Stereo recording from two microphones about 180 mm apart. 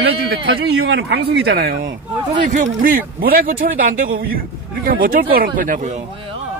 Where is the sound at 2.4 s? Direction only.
45° right (ahead or behind).